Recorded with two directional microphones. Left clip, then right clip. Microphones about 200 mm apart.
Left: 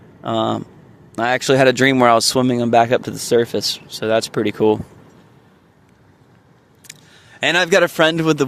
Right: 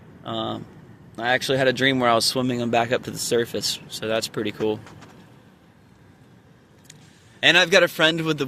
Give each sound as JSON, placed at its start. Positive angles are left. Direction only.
{"t": 0.2, "sound": "speech", "side_deg": 35}
{"t": 6.9, "sound": "a sound", "side_deg": 45}
{"t": 7.3, "sound": "speech", "side_deg": 35}